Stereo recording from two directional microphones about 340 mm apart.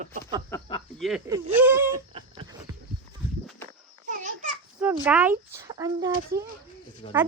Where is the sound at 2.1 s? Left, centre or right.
Centre.